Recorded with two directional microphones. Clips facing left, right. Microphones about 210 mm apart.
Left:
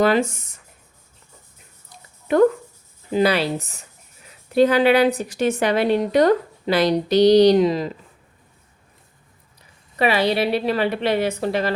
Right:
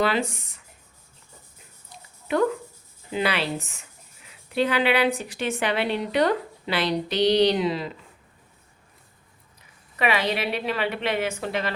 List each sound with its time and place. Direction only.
0.0 s speech: 45° left (ahead or behind)
2.2 s a woman's voice: 45° left (ahead or behind)
10.0 s a woman's voice: 35° left (ahead or behind)